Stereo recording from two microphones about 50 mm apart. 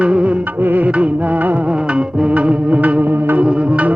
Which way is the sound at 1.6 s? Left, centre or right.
Right.